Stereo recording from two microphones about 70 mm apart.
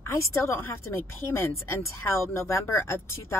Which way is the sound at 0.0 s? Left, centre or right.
Left.